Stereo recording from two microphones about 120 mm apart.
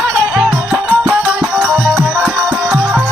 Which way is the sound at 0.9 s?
15° right (ahead or behind).